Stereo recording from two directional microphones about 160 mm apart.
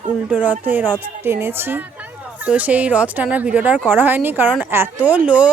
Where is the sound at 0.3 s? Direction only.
10° right (ahead or behind).